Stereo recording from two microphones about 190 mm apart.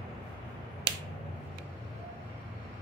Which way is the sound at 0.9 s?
25° right (ahead or behind).